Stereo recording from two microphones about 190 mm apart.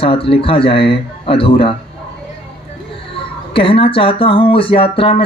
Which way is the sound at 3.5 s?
30° left (ahead or behind).